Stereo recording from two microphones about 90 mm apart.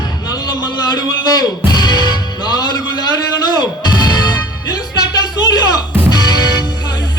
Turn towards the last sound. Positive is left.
turn(degrees=50)  # may be behind; listen again after turning